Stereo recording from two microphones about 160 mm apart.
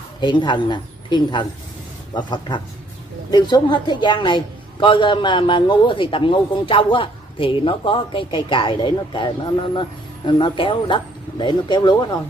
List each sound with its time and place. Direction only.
0.2 s a man's voice: 30° left (ahead or behind)